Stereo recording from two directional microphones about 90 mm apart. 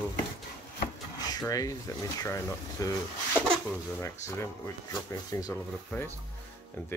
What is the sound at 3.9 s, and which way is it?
Speech, 30° left (ahead or behind).